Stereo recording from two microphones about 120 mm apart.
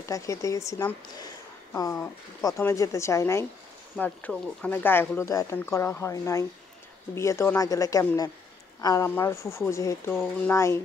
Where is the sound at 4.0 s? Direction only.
10° left (ahead or behind); by 9.1 s 30° left (ahead or behind).